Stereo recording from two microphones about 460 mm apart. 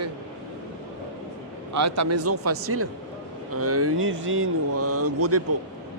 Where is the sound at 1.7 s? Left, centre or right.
Right.